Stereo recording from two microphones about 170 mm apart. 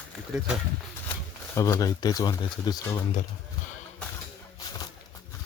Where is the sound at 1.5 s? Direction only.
20° left (ahead or behind).